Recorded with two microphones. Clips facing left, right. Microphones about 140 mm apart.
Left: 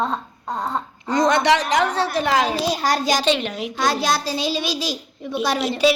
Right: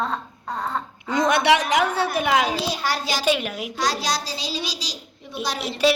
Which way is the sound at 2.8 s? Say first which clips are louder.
Left 5 dB; 45° left (ahead or behind).